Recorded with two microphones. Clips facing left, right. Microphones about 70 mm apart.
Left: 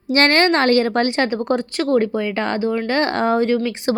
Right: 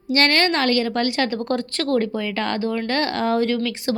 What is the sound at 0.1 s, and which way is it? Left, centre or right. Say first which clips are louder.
Speech: left 4 dB; left.